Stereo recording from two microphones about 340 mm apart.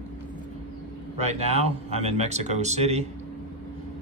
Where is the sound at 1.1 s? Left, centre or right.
Centre.